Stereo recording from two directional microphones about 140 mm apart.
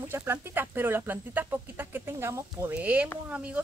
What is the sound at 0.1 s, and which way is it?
Speech, 15° right (ahead or behind).